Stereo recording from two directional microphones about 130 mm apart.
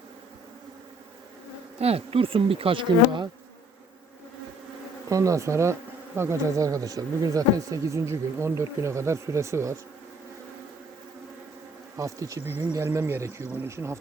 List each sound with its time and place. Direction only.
1.8 s speech: 50° right (ahead or behind)
5.0 s speech: 25° right (ahead or behind)
11.9 s speech: 25° right (ahead or behind)